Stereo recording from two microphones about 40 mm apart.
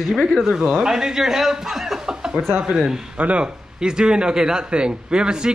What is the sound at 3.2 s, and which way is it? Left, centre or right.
Speech, right.